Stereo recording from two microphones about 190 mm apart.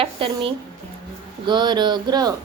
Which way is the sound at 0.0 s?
30° right (ahead or behind).